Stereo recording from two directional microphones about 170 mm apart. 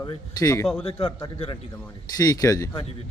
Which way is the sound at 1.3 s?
30° left (ahead or behind).